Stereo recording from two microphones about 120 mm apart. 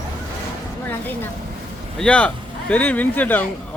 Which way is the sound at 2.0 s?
10° left (ahead or behind).